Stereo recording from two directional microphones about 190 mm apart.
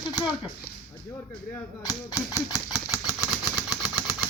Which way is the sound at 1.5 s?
15° left (ahead or behind).